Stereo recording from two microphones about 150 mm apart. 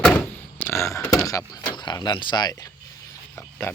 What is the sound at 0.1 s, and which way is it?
Door, 10° left (ahead or behind).